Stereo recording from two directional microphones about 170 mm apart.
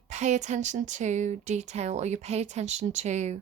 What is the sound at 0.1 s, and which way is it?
A woman's voice, 45° right (ahead or behind).